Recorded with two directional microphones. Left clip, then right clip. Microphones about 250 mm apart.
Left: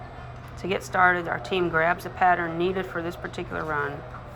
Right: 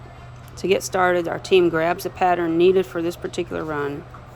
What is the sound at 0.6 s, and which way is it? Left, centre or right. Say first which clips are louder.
Speech: right 2 dB; right.